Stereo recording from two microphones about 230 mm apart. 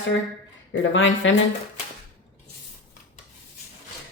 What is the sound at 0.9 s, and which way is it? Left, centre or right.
Speech, left.